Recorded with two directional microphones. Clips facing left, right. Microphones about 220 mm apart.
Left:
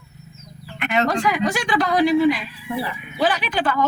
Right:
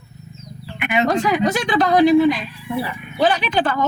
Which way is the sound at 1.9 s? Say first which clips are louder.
Right 5 dB; 50° right (ahead or behind).